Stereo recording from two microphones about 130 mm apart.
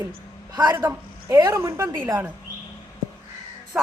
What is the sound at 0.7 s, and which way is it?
A man's voice, 20° right (ahead or behind).